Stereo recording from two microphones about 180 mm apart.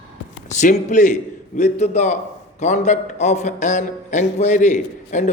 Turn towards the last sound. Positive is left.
turn(degrees=40)  # may be behind; listen again after turning